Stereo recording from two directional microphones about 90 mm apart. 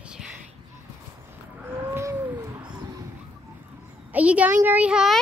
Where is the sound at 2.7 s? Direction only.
50° right (ahead or behind).